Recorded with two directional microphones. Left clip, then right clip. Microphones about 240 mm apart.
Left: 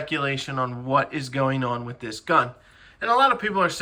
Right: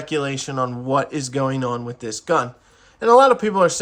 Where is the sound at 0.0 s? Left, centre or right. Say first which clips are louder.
Right 2 dB; centre.